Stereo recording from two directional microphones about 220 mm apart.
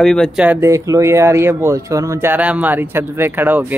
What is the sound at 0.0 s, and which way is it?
Speech, centre (ahead or behind).